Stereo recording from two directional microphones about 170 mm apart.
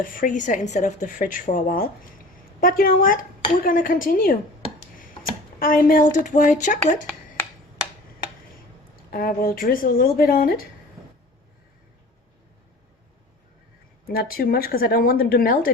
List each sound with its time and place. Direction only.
0.0 s a woman's voice: 55° left (ahead or behind)
5.5 s speech: 55° left (ahead or behind)
9.0 s a woman's voice: 60° left (ahead or behind)
14.1 s a woman's voice: 60° left (ahead or behind)